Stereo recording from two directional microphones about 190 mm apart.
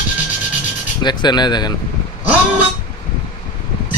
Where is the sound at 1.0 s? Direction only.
20° left (ahead or behind).